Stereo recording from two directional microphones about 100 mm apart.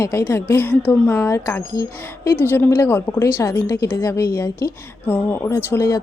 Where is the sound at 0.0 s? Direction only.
25° left (ahead or behind).